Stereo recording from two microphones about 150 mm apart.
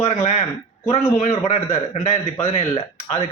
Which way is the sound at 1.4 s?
45° left (ahead or behind).